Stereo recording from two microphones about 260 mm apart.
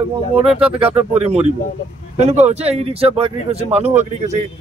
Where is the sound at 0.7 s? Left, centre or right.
Right.